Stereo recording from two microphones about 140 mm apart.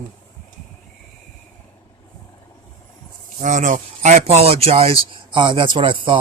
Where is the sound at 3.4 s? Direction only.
65° right (ahead or behind).